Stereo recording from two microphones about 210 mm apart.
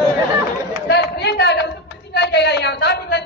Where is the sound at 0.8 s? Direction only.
55° left (ahead or behind).